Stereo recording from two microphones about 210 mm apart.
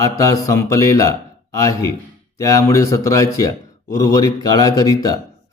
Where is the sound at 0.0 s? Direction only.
15° left (ahead or behind).